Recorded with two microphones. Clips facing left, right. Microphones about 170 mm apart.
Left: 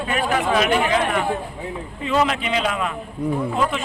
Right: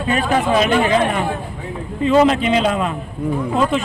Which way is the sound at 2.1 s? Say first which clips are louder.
Right 7 dB; 30° right (ahead or behind).